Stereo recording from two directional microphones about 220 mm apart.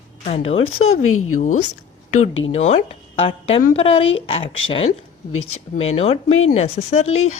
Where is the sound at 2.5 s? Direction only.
30° left (ahead or behind).